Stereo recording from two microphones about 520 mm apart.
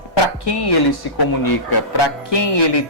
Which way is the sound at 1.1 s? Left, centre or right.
Left.